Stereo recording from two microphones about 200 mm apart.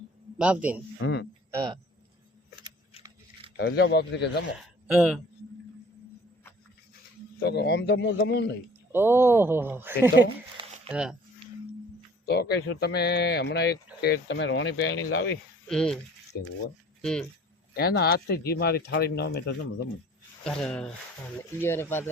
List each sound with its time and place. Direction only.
0.3 s a man's voice: 5° right (ahead or behind)
1.0 s speech: 65° left (ahead or behind)
1.5 s speech: 20° right (ahead or behind)
3.6 s speech: 55° left (ahead or behind)
4.9 s speech: centre (ahead or behind)
7.3 s speech: 55° left (ahead or behind)
8.9 s speech: 10° right (ahead or behind)
12.2 s speech: 55° left (ahead or behind)
15.6 s speech: 5° left (ahead or behind)
16.3 s speech: 50° left (ahead or behind)
17.0 s speech: 5° left (ahead or behind)
17.7 s speech: 50° left (ahead or behind)
20.4 s speech: 5° left (ahead or behind)